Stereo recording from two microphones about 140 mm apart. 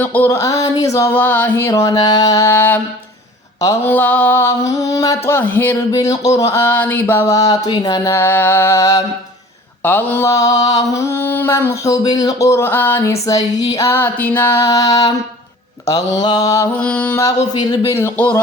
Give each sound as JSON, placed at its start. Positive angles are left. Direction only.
{"t": 0.0, "sound": "mantra", "side_deg": 15}
{"t": 16.7, "sound": "music", "side_deg": 10}
{"t": 17.2, "sound": "mantra", "side_deg": 25}
{"t": 17.9, "sound": "music", "side_deg": 15}